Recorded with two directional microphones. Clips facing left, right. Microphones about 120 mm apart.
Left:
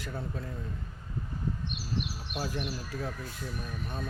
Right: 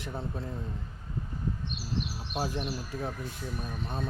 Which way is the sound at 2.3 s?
25° right (ahead or behind).